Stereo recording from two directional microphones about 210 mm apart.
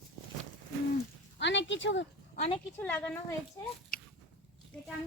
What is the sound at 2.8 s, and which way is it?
Speech, 10° left (ahead or behind).